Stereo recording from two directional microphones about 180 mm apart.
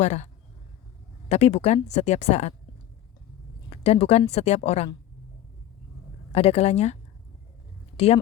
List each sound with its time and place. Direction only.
0.0 s speech: 40° left (ahead or behind)
1.3 s speech: 35° left (ahead or behind)
3.7 s a sound: 35° left (ahead or behind)
4.3 s speech: 35° left (ahead or behind)
6.3 s speech: 35° left (ahead or behind)
7.9 s speech: 35° left (ahead or behind)